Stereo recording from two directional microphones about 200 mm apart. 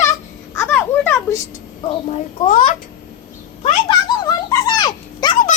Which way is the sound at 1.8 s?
25° left (ahead or behind).